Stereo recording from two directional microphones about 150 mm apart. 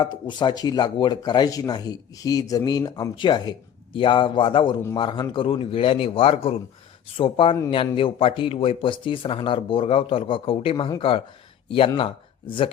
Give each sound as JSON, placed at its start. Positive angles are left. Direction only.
{"t": 0.0, "sound": "a man's voice", "side_deg": 30}